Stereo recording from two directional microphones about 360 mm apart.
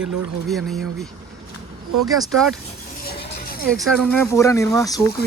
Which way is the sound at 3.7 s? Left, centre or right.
Centre.